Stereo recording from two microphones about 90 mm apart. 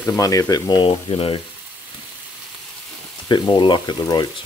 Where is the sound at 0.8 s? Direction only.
80° left.